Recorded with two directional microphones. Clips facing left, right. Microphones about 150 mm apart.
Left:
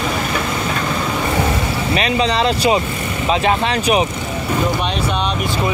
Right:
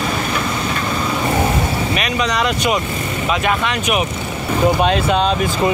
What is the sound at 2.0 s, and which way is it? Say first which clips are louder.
Speech: left 5 dB; 30° left (ahead or behind).